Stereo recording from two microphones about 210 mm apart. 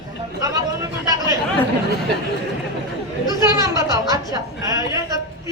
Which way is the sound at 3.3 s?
15° right (ahead or behind).